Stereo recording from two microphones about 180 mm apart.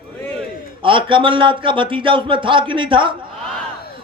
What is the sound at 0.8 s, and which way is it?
A man's voice, 30° right (ahead or behind).